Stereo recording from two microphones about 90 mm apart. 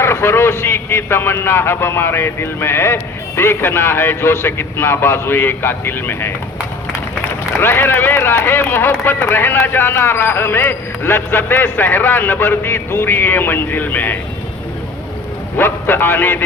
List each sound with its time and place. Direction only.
0.0 s speech: 30° left (ahead or behind)
7.6 s speech: 25° left (ahead or behind)
15.5 s a man's voice: 20° left (ahead or behind)